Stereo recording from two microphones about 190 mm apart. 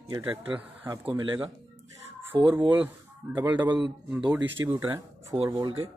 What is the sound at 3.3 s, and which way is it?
Speech, 10° right (ahead or behind).